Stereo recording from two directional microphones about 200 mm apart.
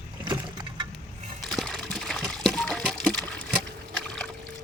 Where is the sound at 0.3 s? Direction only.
20° right (ahead or behind).